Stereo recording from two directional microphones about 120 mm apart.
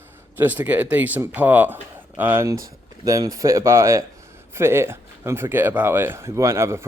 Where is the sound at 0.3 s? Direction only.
15° right (ahead or behind).